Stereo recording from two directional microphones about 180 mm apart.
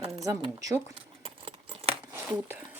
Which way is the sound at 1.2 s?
30° right (ahead or behind).